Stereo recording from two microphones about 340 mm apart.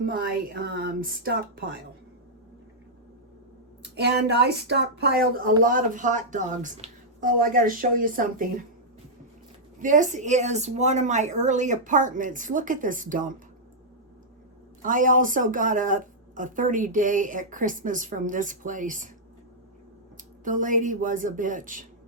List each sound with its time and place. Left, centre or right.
0.0 s a woman's voice: right
3.9 s a woman's voice: right
9.7 s a woman's voice: right
14.8 s a woman's voice: right
20.4 s a woman's voice: right